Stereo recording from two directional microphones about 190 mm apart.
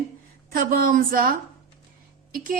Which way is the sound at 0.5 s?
50° right (ahead or behind).